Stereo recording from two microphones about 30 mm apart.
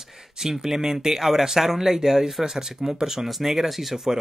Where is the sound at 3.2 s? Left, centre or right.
Centre.